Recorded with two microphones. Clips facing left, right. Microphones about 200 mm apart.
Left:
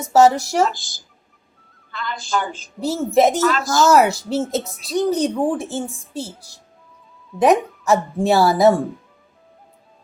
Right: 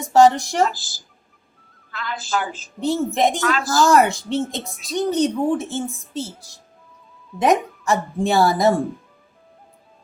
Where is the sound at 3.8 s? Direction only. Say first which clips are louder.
Left 2 dB; 5° left (ahead or behind).